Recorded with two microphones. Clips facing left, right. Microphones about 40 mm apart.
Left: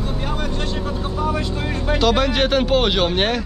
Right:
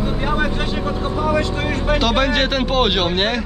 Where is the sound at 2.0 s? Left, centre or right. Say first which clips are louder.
Left 2 dB; centre.